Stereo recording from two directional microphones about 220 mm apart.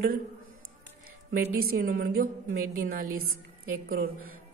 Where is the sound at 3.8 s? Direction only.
40° right (ahead or behind).